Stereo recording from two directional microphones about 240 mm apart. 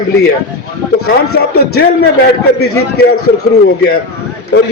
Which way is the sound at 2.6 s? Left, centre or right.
Left.